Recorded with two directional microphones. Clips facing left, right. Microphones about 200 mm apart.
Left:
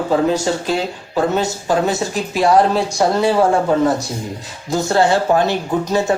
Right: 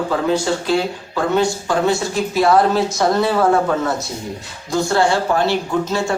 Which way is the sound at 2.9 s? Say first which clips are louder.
Left 1 dB; 10° left (ahead or behind).